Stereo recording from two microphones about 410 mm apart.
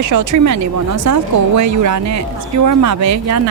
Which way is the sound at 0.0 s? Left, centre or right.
Right.